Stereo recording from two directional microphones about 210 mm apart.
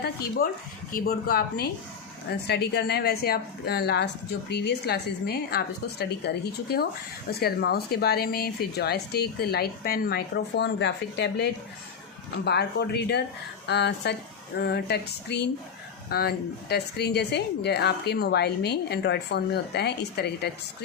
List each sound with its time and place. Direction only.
0.4 s a woman's voice: 50° left (ahead or behind)